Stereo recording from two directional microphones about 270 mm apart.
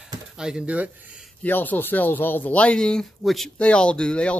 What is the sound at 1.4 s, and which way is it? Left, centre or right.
Speech, centre.